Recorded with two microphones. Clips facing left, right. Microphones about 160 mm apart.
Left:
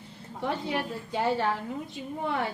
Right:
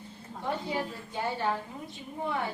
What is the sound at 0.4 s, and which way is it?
Speech, 80° left.